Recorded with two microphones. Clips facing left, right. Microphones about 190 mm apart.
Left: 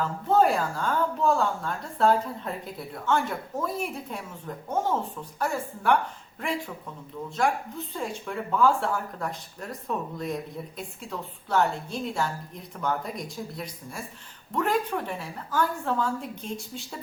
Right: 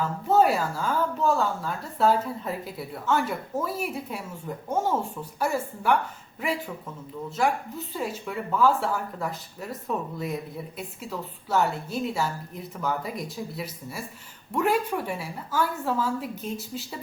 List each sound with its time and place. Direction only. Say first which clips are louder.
0.0 s speech: right 1 dB; 5° right (ahead or behind)
7.9 s a woman's voice: right 1 dB; 5° right (ahead or behind)